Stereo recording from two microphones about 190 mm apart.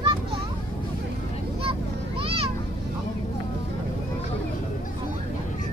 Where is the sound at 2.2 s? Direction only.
30° right (ahead or behind).